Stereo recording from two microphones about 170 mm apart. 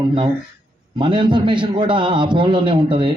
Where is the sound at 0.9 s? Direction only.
30° right (ahead or behind).